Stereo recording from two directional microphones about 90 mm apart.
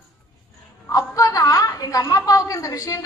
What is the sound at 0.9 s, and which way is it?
A woman's voice, 35° left (ahead or behind).